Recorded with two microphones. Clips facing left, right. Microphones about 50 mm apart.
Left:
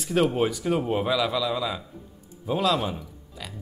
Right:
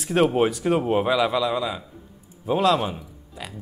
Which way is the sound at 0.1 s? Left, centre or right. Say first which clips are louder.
Right 3 dB; right.